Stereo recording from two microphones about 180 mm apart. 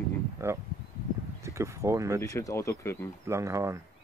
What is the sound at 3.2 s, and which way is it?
Speech, 15° right (ahead or behind).